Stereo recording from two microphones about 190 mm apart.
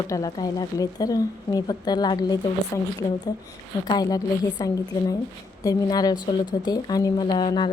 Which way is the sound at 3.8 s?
20° left (ahead or behind).